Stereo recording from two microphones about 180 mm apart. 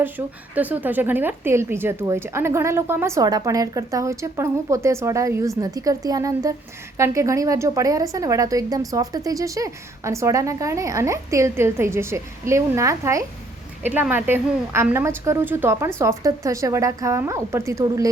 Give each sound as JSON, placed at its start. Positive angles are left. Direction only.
{"t": 0.2, "sound": "a woman's voice", "side_deg": -15}